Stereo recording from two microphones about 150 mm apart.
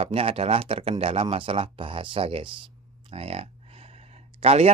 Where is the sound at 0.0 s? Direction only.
40° right (ahead or behind).